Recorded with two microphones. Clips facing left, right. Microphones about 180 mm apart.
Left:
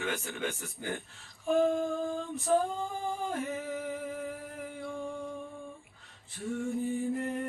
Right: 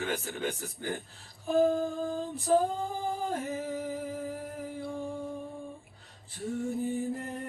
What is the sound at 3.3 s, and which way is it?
Singing, 35° right (ahead or behind).